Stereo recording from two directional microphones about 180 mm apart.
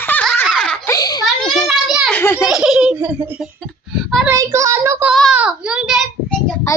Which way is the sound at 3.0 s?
10° right (ahead or behind).